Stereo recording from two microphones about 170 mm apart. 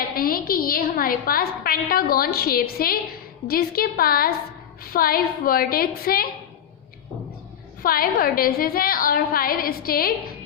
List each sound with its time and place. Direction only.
0.2 s a woman's voice: 60° left (ahead or behind)
7.8 s a woman's voice: 60° left (ahead or behind)